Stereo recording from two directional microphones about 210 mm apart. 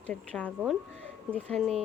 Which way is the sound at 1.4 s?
30° right (ahead or behind).